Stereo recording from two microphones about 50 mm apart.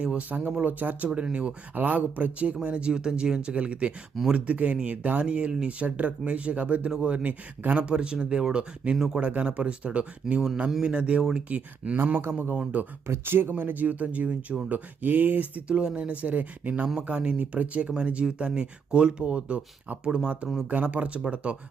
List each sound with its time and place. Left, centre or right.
0.0 s speech: right
1.7 s speech: right
12.3 s speech: right